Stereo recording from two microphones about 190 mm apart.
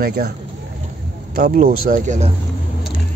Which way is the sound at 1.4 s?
50° right (ahead or behind).